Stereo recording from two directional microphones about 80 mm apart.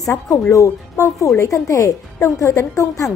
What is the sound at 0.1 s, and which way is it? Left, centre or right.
Speech, left.